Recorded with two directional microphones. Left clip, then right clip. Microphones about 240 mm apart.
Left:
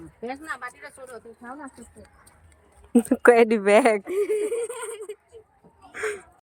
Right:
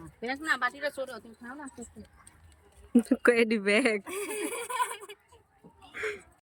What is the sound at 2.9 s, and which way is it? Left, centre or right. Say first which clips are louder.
A woman's voice: left 7 dB; centre.